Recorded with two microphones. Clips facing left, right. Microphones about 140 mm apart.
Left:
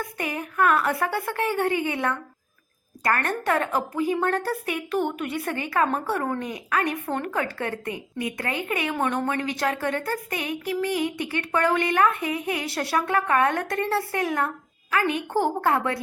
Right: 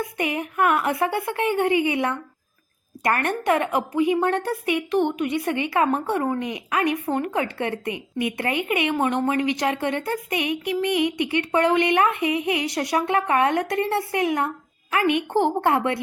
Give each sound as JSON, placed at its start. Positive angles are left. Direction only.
{"t": 0.0, "sound": "a woman's voice", "side_deg": -20}